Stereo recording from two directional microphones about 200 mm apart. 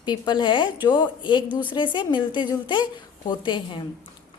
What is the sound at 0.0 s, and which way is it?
A woman's voice, 20° left (ahead or behind).